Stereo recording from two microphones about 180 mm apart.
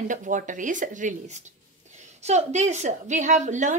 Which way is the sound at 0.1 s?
45° right (ahead or behind).